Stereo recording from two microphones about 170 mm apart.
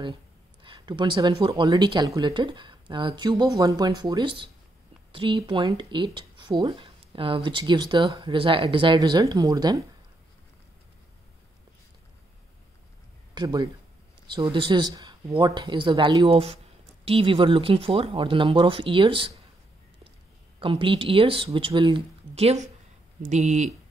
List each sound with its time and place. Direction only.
0.6 s speech: 30° right (ahead or behind)
13.3 s speech: 25° right (ahead or behind)
20.5 s speech: 30° right (ahead or behind)